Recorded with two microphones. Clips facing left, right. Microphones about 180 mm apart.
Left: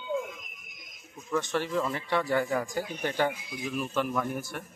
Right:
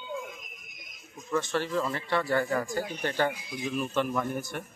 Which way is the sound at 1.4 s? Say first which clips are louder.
Left 1 dB; 15° left (ahead or behind).